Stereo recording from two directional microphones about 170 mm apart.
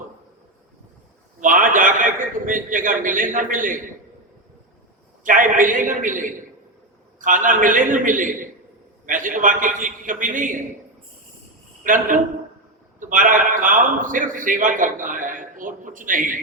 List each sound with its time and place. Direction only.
1.4 s a man's voice: 50° right (ahead or behind)
5.2 s a man's voice: 50° right (ahead or behind)
11.8 s a man's voice: 50° right (ahead or behind)